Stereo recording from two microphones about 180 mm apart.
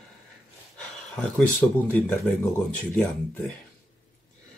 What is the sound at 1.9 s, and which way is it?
Speech, 10° left (ahead or behind).